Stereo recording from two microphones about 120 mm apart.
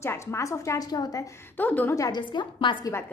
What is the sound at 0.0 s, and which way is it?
Speech, 20° left (ahead or behind).